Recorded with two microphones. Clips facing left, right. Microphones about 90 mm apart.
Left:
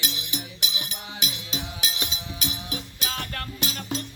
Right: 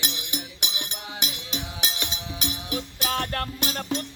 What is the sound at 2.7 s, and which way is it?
Music, 55° right (ahead or behind).